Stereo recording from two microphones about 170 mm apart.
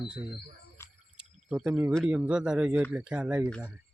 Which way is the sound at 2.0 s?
5° right (ahead or behind).